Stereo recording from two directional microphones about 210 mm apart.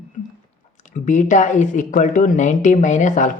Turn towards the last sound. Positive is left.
turn(degrees=35)  # may be behind; listen again after turning